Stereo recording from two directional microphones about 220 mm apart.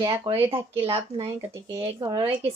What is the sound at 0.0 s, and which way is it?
A woman's voice, 20° right (ahead or behind).